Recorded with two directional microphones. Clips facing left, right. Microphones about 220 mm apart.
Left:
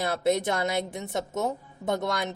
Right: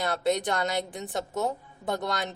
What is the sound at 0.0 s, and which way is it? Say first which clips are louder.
A woman's voice: left 2 dB; 25° left (ahead or behind).